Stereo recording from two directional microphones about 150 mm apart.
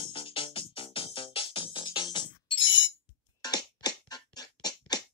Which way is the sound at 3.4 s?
25° left (ahead or behind).